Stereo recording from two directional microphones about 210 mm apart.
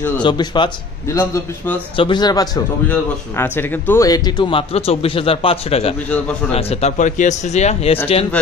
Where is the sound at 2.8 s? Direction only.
10° left (ahead or behind); by 7.9 s 30° left (ahead or behind).